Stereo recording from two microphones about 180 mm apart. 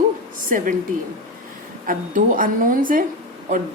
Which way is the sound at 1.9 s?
50° right (ahead or behind).